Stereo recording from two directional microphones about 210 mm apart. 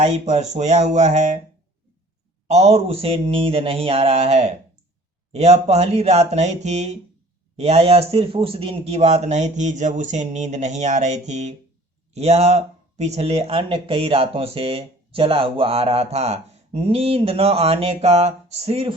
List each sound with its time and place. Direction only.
0.0 s speech: 35° right (ahead or behind)
2.5 s speech: 30° right (ahead or behind)